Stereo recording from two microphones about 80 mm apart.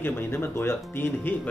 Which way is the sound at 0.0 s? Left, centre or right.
Left.